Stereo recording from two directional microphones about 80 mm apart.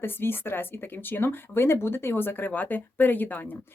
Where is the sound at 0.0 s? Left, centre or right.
Left.